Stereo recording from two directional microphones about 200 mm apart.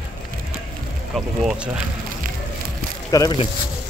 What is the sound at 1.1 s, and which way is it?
Speech, centre (ahead or behind).